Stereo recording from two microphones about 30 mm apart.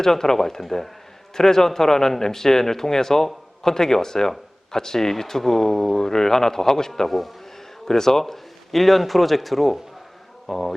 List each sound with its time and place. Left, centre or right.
0.0 s speech: centre
7.1 s speech: centre
7.9 s speech: centre